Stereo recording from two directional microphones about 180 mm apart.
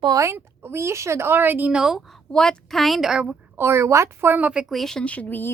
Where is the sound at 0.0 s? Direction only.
20° right (ahead or behind).